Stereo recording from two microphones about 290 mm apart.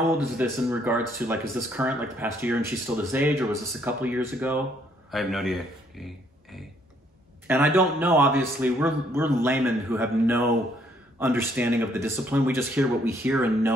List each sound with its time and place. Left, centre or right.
0.4 s speech: centre